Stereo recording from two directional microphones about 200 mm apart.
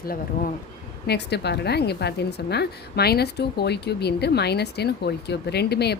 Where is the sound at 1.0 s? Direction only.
55° left (ahead or behind).